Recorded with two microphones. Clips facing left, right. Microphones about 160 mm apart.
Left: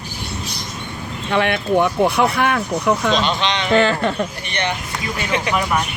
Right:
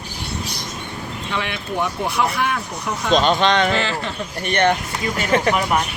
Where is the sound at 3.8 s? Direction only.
55° left (ahead or behind).